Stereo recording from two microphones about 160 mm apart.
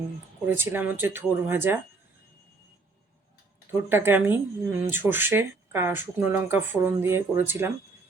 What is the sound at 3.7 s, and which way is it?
Speech, 15° right (ahead or behind).